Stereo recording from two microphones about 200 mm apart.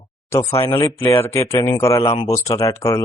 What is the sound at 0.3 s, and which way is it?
Speech, 15° left (ahead or behind).